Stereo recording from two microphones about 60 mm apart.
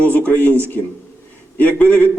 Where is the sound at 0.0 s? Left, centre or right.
Left.